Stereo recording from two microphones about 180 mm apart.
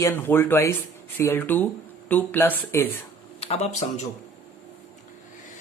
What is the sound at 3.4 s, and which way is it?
Speech, 35° left (ahead or behind).